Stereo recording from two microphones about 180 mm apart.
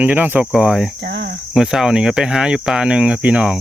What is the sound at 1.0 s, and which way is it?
Cricket, 80° right.